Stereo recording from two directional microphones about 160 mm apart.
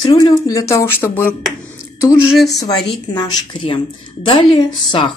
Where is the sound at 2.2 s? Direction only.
5° right (ahead or behind).